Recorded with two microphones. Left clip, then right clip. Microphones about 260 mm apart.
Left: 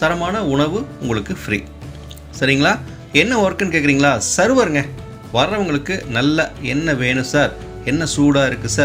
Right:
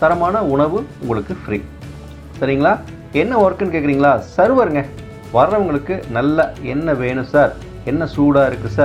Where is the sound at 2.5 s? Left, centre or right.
Left.